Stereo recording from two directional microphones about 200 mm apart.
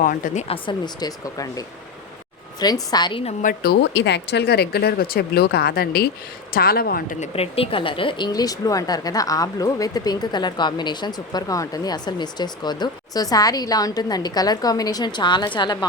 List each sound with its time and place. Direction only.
0.0 s a woman's voice: 40° left (ahead or behind); by 3.3 s 25° left (ahead or behind)
3.4 s a woman's voice: 50° left (ahead or behind); by 15.9 s 20° left (ahead or behind)